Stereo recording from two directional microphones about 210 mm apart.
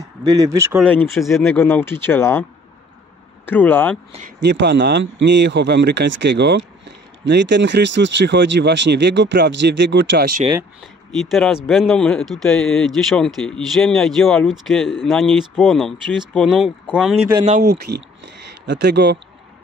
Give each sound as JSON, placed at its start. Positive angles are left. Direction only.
{"t": 0.0, "sound": "speech", "side_deg": -15}
{"t": 0.7, "sound": "speech", "side_deg": 5}
{"t": 3.4, "sound": "speech", "side_deg": 10}
{"t": 4.4, "sound": "speech", "side_deg": -55}
{"t": 10.8, "sound": "speech", "side_deg": 0}
{"t": 17.5, "sound": "speech", "side_deg": -45}